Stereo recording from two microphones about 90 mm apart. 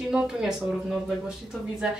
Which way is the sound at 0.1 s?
10° right (ahead or behind).